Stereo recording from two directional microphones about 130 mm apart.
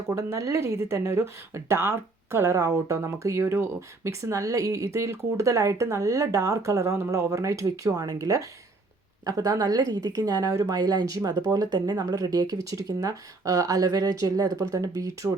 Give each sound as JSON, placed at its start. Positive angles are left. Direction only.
{"t": 0.1, "sound": "speech", "side_deg": -20}